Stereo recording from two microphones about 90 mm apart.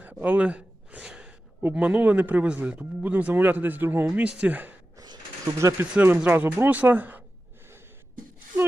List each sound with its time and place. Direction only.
0.0 s gasp: 15° right (ahead or behind)
1.6 s speech: 15° right (ahead or behind)
4.0 s speech: 10° right (ahead or behind)
5.6 s speech: 35° right (ahead or behind)